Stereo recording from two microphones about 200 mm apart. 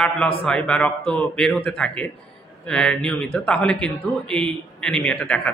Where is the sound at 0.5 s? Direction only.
5° left (ahead or behind).